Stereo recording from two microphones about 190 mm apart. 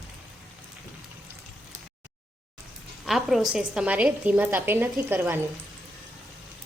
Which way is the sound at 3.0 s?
Centre (ahead or behind).